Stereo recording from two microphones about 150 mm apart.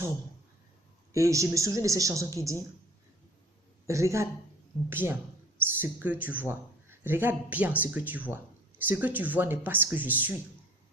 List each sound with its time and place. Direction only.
1.1 s speech: 20° right (ahead or behind)
3.8 s speech: 20° right (ahead or behind)